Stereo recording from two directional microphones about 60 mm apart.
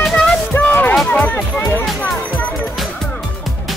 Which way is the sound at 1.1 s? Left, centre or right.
Left.